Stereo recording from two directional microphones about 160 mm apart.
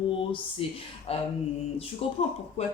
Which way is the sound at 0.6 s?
35° left (ahead or behind).